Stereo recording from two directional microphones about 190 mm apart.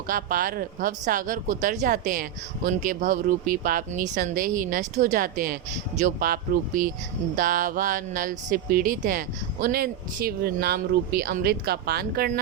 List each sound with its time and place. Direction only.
0.1 s speech: 50° right (ahead or behind)